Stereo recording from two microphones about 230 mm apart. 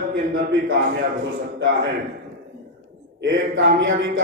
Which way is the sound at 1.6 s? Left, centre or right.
Right.